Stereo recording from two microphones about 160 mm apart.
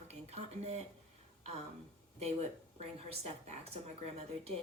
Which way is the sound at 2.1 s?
40° right (ahead or behind).